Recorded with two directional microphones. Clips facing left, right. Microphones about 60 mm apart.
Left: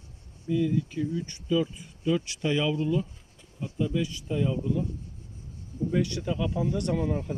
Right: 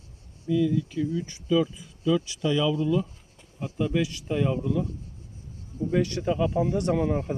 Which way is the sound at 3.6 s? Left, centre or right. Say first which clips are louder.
Right 3 dB; right.